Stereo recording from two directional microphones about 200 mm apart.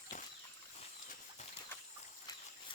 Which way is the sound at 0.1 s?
40° left (ahead or behind).